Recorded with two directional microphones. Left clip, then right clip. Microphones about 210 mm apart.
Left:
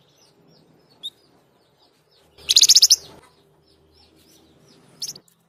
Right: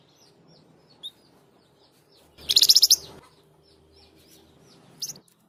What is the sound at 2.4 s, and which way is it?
Chirp, 20° left (ahead or behind).